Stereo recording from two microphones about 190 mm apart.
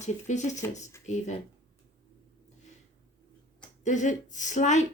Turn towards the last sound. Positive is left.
turn(degrees=40)  # may be behind; listen again after turning